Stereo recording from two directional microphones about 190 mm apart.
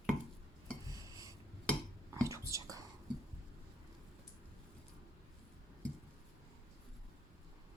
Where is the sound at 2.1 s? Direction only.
15° right (ahead or behind).